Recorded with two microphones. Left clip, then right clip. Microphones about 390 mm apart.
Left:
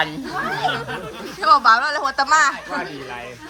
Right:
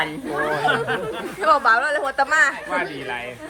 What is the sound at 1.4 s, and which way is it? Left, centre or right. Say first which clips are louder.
Speech: left 3 dB; centre.